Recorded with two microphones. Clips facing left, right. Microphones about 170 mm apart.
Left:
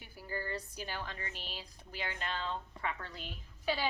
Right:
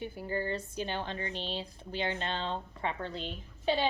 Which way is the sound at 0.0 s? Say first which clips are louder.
Right 8 dB; 25° right (ahead or behind).